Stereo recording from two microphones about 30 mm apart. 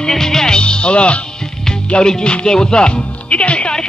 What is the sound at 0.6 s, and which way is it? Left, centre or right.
Speech, left.